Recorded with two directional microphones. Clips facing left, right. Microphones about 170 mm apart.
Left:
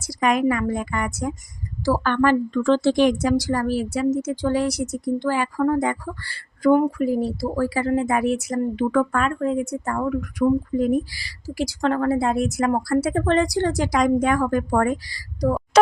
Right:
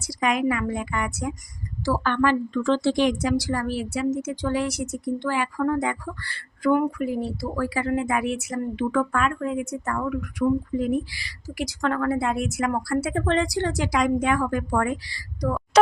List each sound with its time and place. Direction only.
0.1 s a woman's voice: 45° left (ahead or behind)